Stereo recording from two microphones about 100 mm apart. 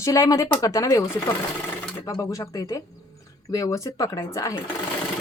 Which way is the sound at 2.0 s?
35° left (ahead or behind).